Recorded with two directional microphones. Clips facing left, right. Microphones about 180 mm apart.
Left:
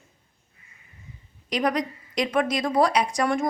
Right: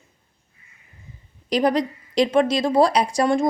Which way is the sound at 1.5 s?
30° right (ahead or behind).